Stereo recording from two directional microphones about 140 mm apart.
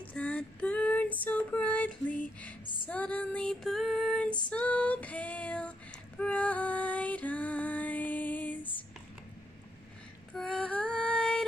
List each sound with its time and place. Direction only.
0.1 s female singing: 10° left (ahead or behind)
2.6 s music: 35° left (ahead or behind)
2.9 s female singing: 10° left (ahead or behind)
4.5 s child singing: 10° left (ahead or behind)
10.3 s female singing: centre (ahead or behind)